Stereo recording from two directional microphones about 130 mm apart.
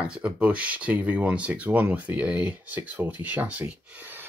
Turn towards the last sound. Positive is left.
turn(degrees=-15)  # may be behind; listen again after turning